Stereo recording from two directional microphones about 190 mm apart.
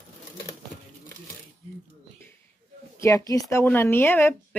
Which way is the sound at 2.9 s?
15° left (ahead or behind).